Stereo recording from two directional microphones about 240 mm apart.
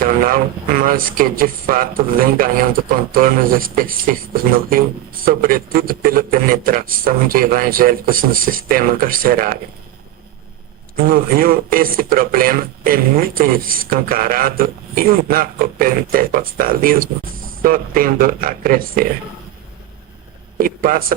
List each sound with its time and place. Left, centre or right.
0.0 s speech: right
11.0 s speech: right
20.6 s speech: right